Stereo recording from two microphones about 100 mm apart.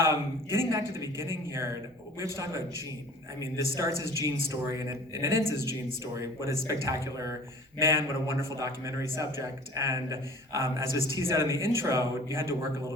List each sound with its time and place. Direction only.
0.0 s a man's voice: 25° right (ahead or behind)
3.4 s a man's voice: 30° right (ahead or behind)